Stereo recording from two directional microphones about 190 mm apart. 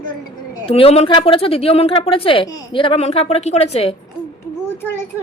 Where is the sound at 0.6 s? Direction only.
30° left (ahead or behind).